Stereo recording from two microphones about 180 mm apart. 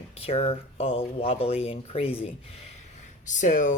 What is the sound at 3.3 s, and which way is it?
Speech, 45° left (ahead or behind).